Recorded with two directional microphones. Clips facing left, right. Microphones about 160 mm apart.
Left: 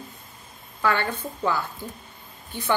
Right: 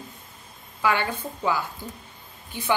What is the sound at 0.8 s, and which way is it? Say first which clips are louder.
Speech: even; 10° right (ahead or behind).